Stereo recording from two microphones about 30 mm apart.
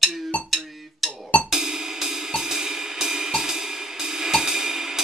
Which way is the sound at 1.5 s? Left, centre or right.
Centre.